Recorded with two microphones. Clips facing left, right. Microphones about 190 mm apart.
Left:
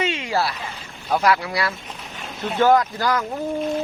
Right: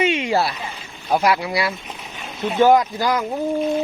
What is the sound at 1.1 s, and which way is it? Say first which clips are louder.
Speech: right 1 dB; 15° right (ahead or behind).